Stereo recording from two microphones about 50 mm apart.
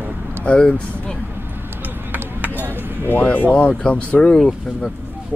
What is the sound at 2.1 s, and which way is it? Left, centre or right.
Chop, right.